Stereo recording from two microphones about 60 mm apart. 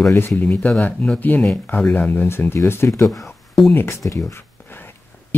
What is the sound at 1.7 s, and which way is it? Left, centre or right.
Speech, left.